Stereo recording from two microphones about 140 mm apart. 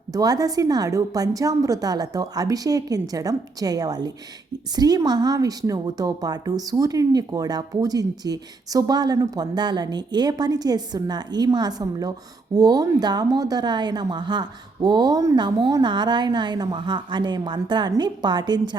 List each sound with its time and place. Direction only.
0.1 s a woman's voice: 25° right (ahead or behind)